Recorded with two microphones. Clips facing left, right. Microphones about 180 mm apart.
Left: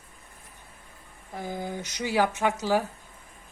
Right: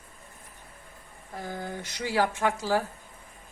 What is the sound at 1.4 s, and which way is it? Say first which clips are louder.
A woman's voice: left 2 dB; 15° left (ahead or behind).